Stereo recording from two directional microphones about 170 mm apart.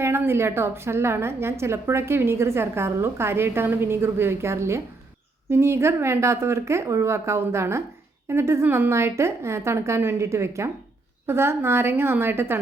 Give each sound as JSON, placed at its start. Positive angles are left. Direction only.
{"t": 0.0, "sound": "a woman's voice", "side_deg": -15}